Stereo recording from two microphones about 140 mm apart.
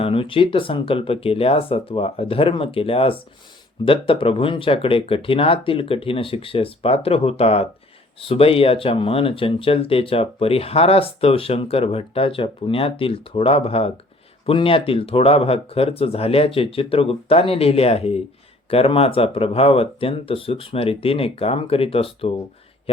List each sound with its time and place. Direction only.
0.0 s speech: 40° left (ahead or behind)